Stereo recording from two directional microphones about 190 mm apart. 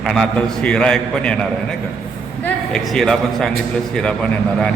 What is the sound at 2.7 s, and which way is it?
A man's voice, centre (ahead or behind).